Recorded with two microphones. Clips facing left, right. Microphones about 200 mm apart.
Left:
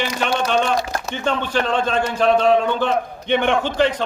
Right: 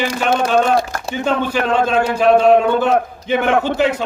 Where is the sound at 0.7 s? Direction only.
50° right (ahead or behind).